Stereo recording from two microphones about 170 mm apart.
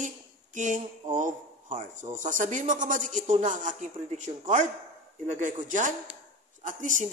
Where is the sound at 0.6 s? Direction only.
50° right (ahead or behind).